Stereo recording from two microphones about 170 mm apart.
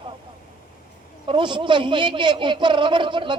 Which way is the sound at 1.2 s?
30° right (ahead or behind).